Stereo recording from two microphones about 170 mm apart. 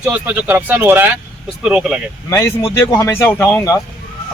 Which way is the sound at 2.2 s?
15° left (ahead or behind).